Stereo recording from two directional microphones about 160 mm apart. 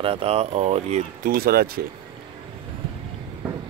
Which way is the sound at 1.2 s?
65° right (ahead or behind).